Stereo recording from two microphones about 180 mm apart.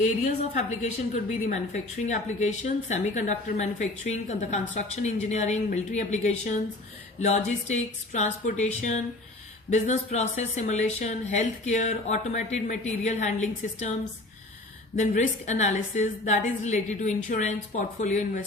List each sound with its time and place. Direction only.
0.0 s a woman's voice: 40° left (ahead or behind)
14.9 s a woman's voice: 40° left (ahead or behind)